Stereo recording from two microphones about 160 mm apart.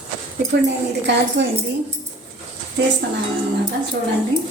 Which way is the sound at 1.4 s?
90° right.